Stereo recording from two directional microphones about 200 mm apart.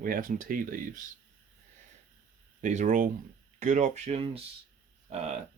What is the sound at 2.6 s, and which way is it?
Speech, 40° right (ahead or behind).